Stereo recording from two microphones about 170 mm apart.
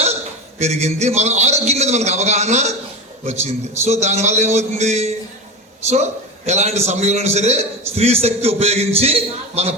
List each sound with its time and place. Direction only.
0.6 s a man's voice: 40° right (ahead or behind)